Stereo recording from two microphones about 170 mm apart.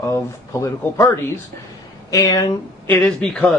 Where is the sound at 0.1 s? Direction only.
20° left (ahead or behind).